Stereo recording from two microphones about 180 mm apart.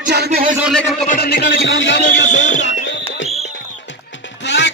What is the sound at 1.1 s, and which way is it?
Music, 60° left (ahead or behind).